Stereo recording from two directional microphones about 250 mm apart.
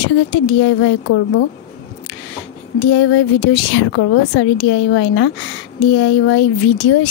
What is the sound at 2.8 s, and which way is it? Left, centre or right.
Speech, left.